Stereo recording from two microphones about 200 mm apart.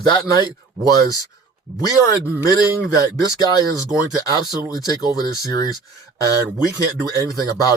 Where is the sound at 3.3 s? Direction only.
20° left (ahead or behind).